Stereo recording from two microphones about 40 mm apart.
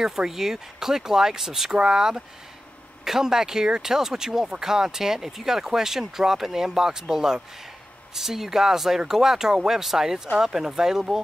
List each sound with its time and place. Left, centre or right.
0.0 s speech: centre